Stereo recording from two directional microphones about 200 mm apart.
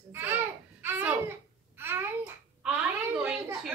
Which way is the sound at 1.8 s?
10° right (ahead or behind).